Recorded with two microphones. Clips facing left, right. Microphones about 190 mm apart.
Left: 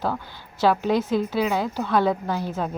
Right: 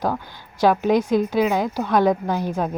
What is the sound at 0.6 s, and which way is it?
A woman's voice, 15° right (ahead or behind).